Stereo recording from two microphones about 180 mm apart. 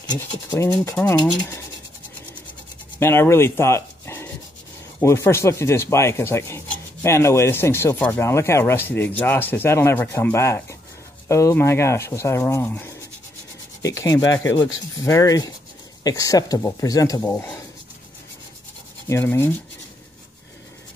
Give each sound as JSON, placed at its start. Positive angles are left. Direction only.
{"t": 0.1, "sound": "speech", "side_deg": 20}
{"t": 0.7, "sound": "rub", "side_deg": 10}
{"t": 3.0, "sound": "speech", "side_deg": 15}
{"t": 5.0, "sound": "rub", "side_deg": 15}
{"t": 13.8, "sound": "speech", "side_deg": 20}
{"t": 19.0, "sound": "rub", "side_deg": 15}